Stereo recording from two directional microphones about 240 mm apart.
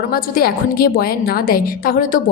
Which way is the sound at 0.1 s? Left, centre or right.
Left.